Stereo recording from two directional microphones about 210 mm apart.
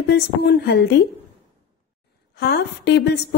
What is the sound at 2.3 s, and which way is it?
Speech, 50° left (ahead or behind).